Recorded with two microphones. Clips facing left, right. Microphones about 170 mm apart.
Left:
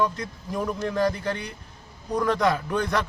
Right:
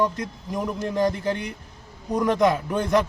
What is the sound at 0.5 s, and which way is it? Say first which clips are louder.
Speech: right 1 dB; 20° right (ahead or behind).